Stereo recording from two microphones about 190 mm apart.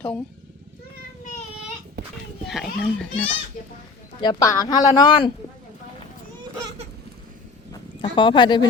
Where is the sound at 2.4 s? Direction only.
Centre (ahead or behind).